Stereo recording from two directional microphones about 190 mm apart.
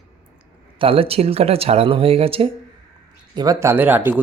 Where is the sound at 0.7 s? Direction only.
30° right (ahead or behind).